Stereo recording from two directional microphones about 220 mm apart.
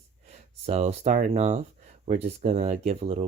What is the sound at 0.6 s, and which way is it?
Speech, 30° right (ahead or behind).